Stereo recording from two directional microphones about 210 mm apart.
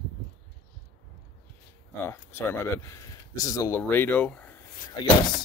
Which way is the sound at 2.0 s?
10° left (ahead or behind).